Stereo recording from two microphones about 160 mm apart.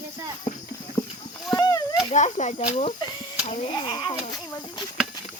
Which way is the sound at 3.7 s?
25° left (ahead or behind).